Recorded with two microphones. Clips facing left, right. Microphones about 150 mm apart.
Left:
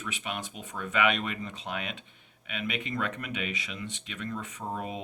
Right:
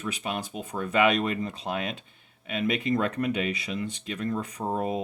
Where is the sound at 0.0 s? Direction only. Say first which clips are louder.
Right 5 dB; 35° right (ahead or behind).